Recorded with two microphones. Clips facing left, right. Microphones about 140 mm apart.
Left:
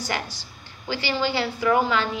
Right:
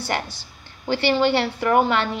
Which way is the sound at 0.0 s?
55° right (ahead or behind).